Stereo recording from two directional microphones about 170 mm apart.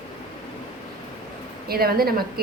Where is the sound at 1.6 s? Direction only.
65° right (ahead or behind).